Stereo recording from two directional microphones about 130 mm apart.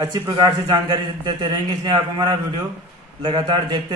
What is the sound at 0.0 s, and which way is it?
A man's voice, 30° right (ahead or behind).